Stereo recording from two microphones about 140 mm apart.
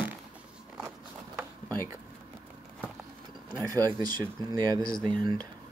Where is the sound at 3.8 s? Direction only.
30° right (ahead or behind).